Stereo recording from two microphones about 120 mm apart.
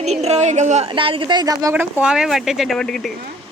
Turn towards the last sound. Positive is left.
turn(degrees=5)  # may be behind; listen again after turning